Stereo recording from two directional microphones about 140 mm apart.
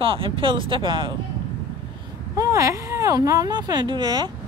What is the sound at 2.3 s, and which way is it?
Speech, 25° right (ahead or behind).